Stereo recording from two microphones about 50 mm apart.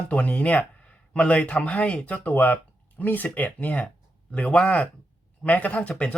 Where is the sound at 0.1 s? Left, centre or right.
Left.